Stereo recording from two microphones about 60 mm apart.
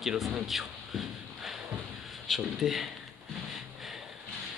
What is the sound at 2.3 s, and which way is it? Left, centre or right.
Speech, centre.